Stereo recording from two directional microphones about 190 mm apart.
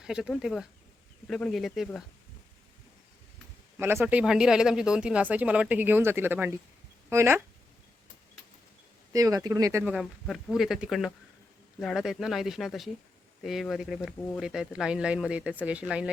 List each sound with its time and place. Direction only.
0.0 s speech: centre (ahead or behind)
3.8 s speech: 10° right (ahead or behind)
9.1 s speech: 20° right (ahead or behind)
9.9 s speech: centre (ahead or behind)